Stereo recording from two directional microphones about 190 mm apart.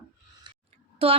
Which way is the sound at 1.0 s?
30° right (ahead or behind).